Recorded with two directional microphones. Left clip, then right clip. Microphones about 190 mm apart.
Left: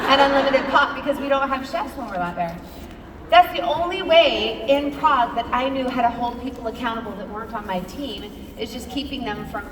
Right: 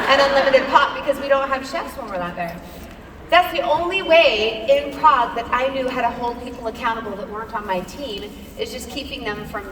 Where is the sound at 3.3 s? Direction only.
15° right (ahead or behind).